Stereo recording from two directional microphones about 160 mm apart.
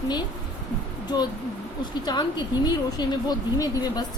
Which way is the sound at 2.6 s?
25° left (ahead or behind).